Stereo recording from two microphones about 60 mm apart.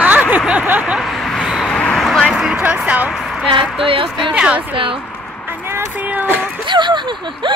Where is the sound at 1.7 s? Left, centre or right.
Centre.